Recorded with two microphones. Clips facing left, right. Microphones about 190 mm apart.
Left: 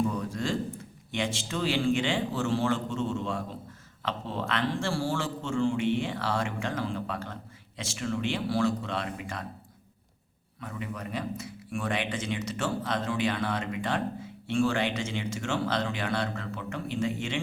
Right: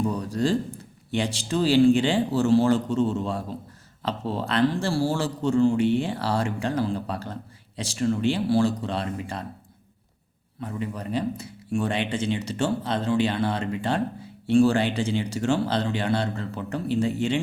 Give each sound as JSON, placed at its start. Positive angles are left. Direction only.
{"t": 0.0, "sound": "a sound", "side_deg": -35}
{"t": 1.1, "sound": "speech", "side_deg": -35}
{"t": 10.6, "sound": "speech", "side_deg": -35}